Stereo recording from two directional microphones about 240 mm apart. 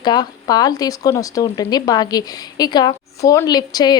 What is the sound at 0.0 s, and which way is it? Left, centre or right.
Speech, centre.